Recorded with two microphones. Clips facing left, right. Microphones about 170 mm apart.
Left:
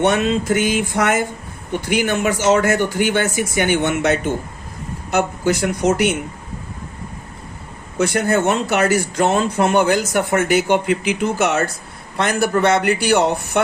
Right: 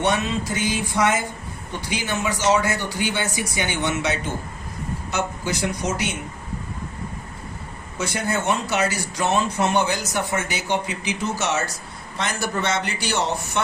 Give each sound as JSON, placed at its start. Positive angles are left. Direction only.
{"t": 0.0, "sound": "speech", "side_deg": 55}
{"t": 7.9, "sound": "speech", "side_deg": 55}